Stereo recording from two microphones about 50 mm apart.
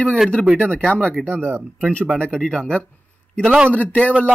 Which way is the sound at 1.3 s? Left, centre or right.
Right.